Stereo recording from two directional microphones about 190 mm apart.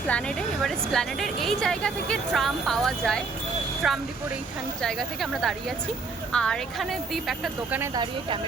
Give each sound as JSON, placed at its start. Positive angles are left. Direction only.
{"t": 0.1, "sound": "a woman's voice", "side_deg": 5}
{"t": 7.8, "sound": "speech", "side_deg": -20}